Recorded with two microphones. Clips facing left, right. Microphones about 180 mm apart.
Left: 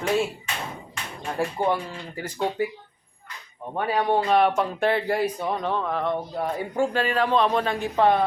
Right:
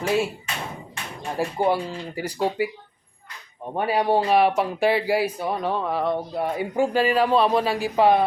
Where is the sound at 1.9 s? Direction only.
15° right (ahead or behind).